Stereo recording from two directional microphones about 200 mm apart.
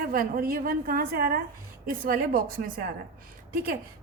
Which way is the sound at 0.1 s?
45° right (ahead or behind).